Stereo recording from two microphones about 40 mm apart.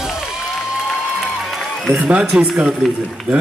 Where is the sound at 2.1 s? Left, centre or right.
Right.